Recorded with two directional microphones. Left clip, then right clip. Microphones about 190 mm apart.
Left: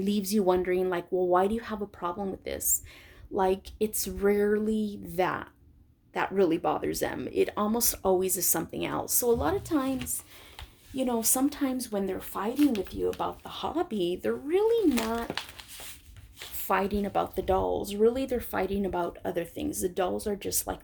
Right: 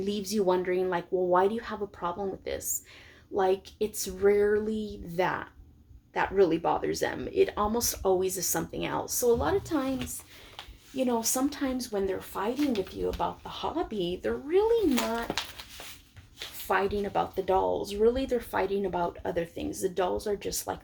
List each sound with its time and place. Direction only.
0.0 s speech: 45° left (ahead or behind)
10.9 s speech: 45° left (ahead or behind)
14.8 s speech: 25° left (ahead or behind)
16.6 s speech: 50° left (ahead or behind)